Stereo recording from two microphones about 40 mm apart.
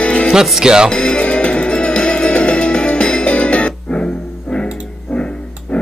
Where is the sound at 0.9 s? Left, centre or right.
Left.